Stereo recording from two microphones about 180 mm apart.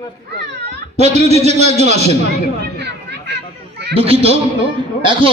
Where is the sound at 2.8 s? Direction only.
70° right (ahead or behind).